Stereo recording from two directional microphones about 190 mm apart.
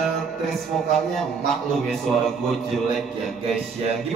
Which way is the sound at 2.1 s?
5° left (ahead or behind).